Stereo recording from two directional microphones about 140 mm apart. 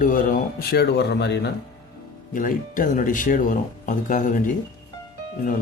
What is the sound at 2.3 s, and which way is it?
Speech, 70° left (ahead or behind).